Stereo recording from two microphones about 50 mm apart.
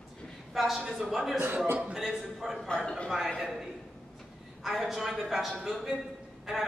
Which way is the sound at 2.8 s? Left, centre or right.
Centre.